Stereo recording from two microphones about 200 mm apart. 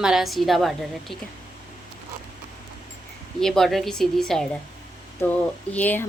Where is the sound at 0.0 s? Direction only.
Centre (ahead or behind).